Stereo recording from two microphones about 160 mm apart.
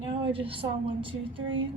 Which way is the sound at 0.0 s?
35° right (ahead or behind).